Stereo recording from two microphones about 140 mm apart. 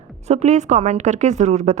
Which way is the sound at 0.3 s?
55° right (ahead or behind).